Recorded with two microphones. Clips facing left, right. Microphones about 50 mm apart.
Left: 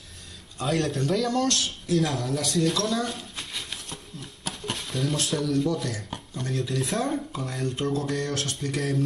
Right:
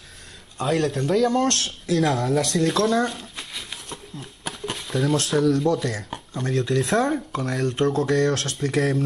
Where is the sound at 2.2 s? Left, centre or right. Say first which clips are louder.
Right 5 dB; right.